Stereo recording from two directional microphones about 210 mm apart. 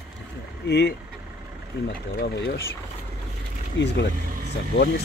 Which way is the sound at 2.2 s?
50° left (ahead or behind).